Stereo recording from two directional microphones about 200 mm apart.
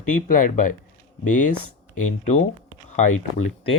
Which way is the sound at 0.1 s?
40° left (ahead or behind).